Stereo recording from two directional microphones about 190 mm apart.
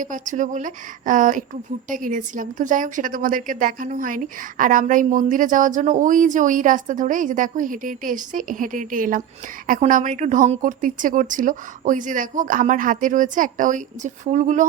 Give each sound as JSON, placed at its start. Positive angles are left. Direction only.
{"t": 0.0, "sound": "a woman's voice", "side_deg": -40}